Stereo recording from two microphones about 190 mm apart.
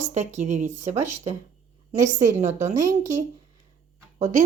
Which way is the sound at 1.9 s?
40° right (ahead or behind).